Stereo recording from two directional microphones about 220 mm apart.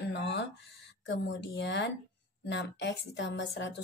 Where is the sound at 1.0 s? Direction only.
50° left (ahead or behind).